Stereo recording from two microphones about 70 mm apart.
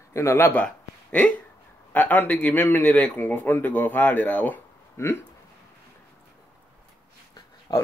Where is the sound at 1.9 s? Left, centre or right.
Left.